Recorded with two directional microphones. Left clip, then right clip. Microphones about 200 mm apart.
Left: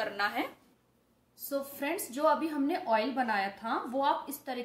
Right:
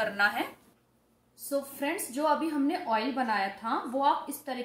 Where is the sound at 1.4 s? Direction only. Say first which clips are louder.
Right 3 dB; centre (ahead or behind).